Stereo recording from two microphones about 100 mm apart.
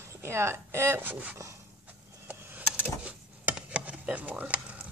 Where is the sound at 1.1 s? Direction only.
15° right (ahead or behind).